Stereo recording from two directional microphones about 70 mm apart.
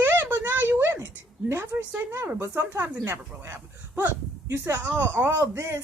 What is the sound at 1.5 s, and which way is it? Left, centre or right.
Speech, right.